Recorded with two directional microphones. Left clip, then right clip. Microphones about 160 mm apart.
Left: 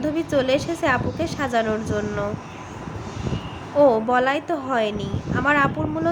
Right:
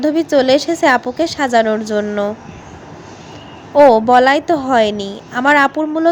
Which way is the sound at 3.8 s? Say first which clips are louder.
Right 9 dB; 35° right (ahead or behind).